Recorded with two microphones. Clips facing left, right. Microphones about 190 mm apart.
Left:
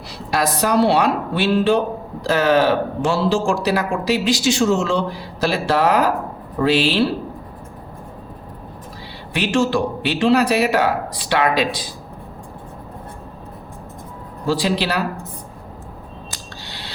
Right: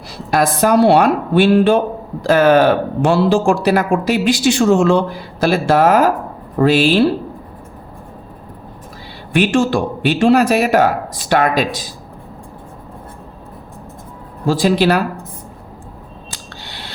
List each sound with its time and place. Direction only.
0.3 s speech: 50° right (ahead or behind)
9.3 s speech: 50° right (ahead or behind)
14.4 s speech: 50° right (ahead or behind)
16.6 s cutlery: 55° right (ahead or behind)